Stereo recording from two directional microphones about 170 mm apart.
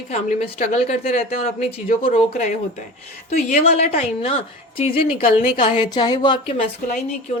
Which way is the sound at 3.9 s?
35° left (ahead or behind).